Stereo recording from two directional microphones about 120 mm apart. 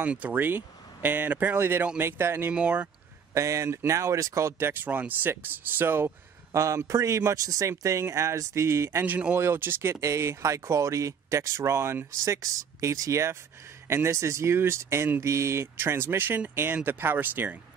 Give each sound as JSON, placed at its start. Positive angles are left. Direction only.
{"t": 0.0, "sound": "speech", "side_deg": -10}
{"t": 3.3, "sound": "speech", "side_deg": -25}
{"t": 9.0, "sound": "speech", "side_deg": -10}